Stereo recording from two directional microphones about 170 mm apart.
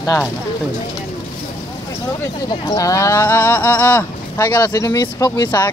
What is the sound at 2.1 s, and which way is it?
Speech, 25° left (ahead or behind).